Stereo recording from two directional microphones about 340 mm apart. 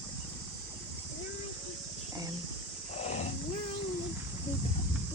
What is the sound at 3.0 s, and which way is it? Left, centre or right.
Wild animals, centre.